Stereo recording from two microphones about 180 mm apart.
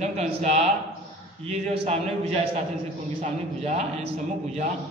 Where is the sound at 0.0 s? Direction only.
40° right (ahead or behind).